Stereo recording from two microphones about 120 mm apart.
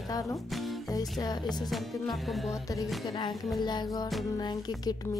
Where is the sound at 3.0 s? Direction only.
40° left (ahead or behind).